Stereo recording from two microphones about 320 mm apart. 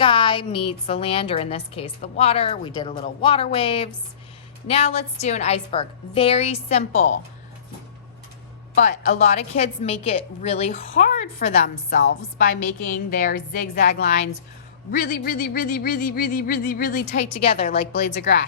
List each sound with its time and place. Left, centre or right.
0.0 s a woman's voice: centre
8.7 s a woman's voice: left
17.9 s speech: left